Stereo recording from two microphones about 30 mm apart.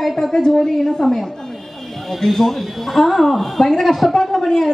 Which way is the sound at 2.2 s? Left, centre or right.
Centre.